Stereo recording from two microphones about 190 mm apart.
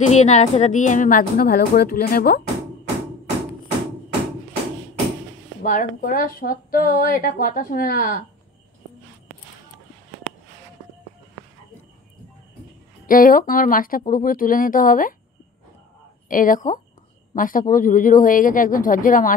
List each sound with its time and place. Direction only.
0.0 s speech: 35° left (ahead or behind); by 2.4 s 55° left (ahead or behind)
5.6 s speech: 45° left (ahead or behind)
13.0 s speech: 45° left (ahead or behind)
16.3 s speech: 45° left (ahead or behind)